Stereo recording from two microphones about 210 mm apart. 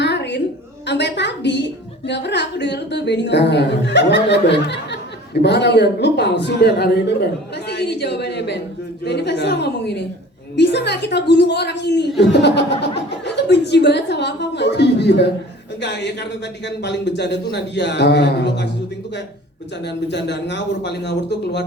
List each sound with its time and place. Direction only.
0.0 s a sound: 55° left (ahead or behind)
0.9 s a woman's voice: 55° left (ahead or behind)
16.6 s a woman's voice: 55° left (ahead or behind)
19.8 s a woman's voice: 55° left (ahead or behind)